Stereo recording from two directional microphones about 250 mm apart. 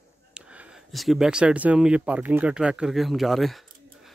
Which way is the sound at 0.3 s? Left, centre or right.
Centre.